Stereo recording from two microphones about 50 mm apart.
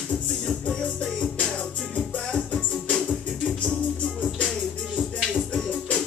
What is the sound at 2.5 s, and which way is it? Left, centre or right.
Music, centre.